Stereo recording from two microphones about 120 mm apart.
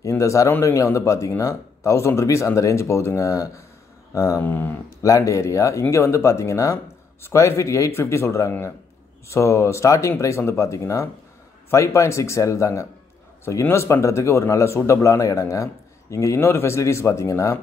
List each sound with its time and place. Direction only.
0.0 s speech: 25° left (ahead or behind)